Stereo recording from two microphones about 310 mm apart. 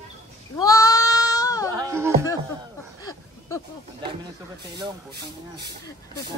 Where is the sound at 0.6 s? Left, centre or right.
Centre.